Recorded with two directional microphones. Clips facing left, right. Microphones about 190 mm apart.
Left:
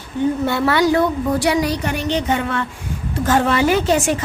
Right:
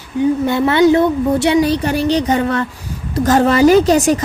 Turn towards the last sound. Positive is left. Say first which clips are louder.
# right 6 dB
turn(degrees=-40)  # may be behind; listen again after turning